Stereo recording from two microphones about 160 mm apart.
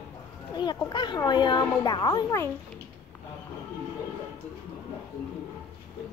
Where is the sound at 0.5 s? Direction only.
25° left (ahead or behind).